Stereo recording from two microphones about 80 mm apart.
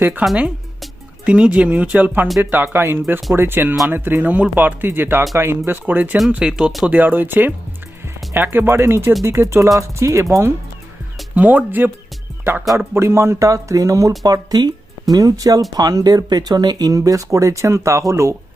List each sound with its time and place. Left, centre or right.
0.0 s speech: right
6.3 s speech: centre
6.8 s speech: right
11.3 s speech: right
12.9 s speech: right
14.3 s speech: right